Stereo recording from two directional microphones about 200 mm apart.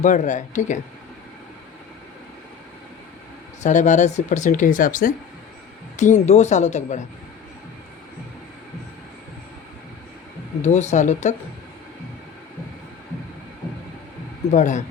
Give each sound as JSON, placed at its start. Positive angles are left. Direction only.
{"t": 0.0, "sound": "speech", "side_deg": 40}
{"t": 3.6, "sound": "speech", "side_deg": 35}
{"t": 10.6, "sound": "speech", "side_deg": 35}
{"t": 14.5, "sound": "speech", "side_deg": 40}